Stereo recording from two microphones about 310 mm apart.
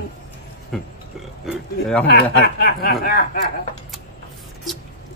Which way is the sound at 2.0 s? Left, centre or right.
Left.